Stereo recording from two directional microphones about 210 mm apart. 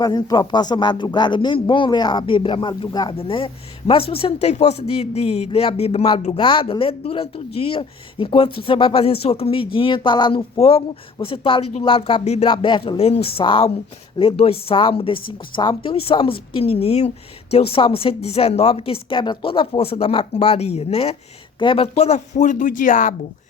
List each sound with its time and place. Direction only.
0.0 s a man's voice: 20° left (ahead or behind); by 23.1 s 40° left (ahead or behind)